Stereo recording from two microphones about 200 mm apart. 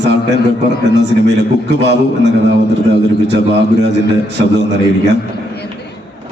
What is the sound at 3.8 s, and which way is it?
A man's voice, 60° right (ahead or behind).